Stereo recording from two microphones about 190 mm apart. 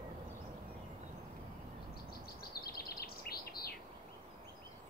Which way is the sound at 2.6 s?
55° left (ahead or behind).